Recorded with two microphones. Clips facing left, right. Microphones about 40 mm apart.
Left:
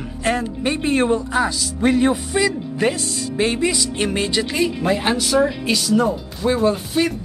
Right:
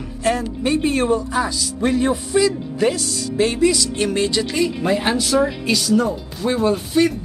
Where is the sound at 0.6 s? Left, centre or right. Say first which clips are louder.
Even; left.